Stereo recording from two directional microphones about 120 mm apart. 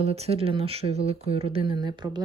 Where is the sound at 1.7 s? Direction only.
40° right (ahead or behind).